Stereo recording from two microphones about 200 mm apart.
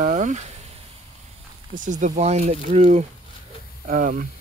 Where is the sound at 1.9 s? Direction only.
35° right (ahead or behind).